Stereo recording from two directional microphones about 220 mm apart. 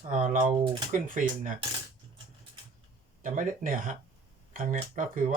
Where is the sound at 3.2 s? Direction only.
40° right (ahead or behind).